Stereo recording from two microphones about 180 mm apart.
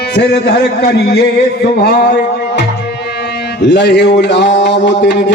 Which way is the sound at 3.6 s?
75° left (ahead or behind).